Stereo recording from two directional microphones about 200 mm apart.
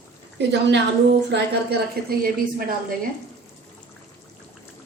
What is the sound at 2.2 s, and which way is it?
Speech, 45° right (ahead or behind).